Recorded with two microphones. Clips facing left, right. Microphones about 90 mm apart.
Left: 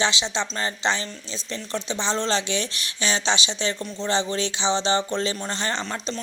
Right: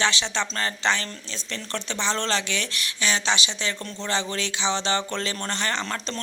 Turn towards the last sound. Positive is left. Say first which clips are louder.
# even
turn(degrees=20)  # may be behind; listen again after turning